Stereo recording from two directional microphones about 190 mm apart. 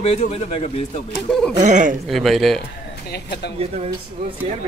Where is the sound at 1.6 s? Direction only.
40° right (ahead or behind).